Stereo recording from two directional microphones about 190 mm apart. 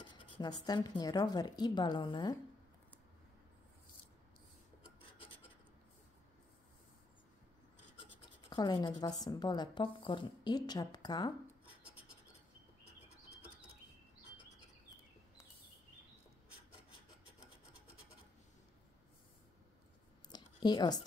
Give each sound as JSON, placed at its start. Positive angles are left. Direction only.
{"t": 0.0, "sound": "speech", "side_deg": 25}
{"t": 8.0, "sound": "rub", "side_deg": 25}
{"t": 20.2, "sound": "a sound", "side_deg": 20}